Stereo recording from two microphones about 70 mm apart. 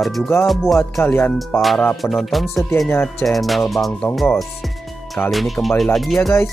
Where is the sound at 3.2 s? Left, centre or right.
Centre.